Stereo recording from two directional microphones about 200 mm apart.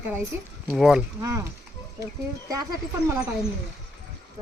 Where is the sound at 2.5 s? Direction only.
20° right (ahead or behind).